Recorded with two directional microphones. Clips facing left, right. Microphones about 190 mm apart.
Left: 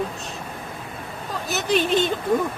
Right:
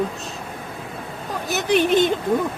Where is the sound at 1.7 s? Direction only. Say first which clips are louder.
Right 4 dB; 15° right (ahead or behind).